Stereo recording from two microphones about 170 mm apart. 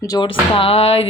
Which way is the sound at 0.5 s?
35° left (ahead or behind).